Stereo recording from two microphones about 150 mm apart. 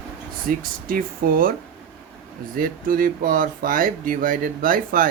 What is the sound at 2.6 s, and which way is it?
Speech, 70° right (ahead or behind).